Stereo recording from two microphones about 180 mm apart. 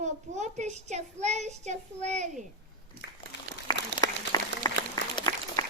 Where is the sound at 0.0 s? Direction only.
40° right (ahead or behind).